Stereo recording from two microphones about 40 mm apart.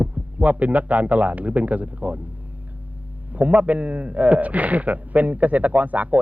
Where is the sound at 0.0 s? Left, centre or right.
Right.